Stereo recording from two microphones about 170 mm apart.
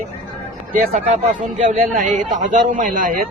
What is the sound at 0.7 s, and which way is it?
Speech, 50° right (ahead or behind).